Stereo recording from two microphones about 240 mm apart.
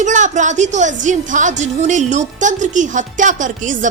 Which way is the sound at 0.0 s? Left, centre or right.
Right.